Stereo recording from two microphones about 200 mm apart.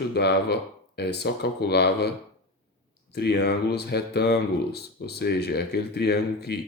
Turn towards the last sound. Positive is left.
turn(degrees=55)  # may be behind; listen again after turning